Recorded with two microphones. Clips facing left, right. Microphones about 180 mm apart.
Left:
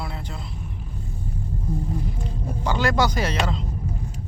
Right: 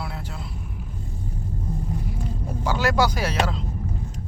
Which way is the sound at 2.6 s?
5° right (ahead or behind).